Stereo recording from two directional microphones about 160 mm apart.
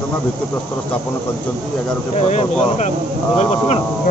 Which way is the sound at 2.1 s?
45° left (ahead or behind).